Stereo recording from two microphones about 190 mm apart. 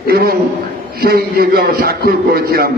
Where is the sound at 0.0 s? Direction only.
55° right (ahead or behind).